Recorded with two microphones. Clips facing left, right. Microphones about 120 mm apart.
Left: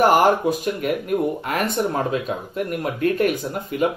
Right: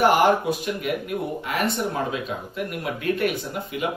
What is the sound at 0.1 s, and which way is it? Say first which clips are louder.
Speech: left 2 dB; 45° left (ahead or behind).